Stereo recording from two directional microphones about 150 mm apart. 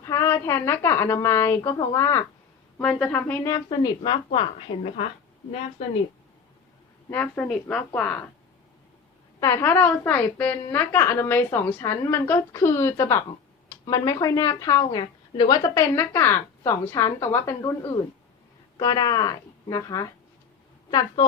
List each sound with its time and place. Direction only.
0.0 s a woman's voice: 20° left (ahead or behind)
2.7 s a woman's voice: 10° left (ahead or behind)
3.5 s a woman's voice: 30° left (ahead or behind)
7.1 s a woman's voice: 10° left (ahead or behind)
9.4 s a woman's voice: 20° left (ahead or behind)